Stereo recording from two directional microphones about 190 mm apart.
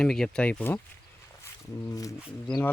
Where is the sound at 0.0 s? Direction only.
5° left (ahead or behind).